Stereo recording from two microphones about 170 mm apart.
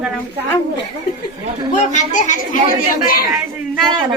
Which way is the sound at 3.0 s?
60° left (ahead or behind).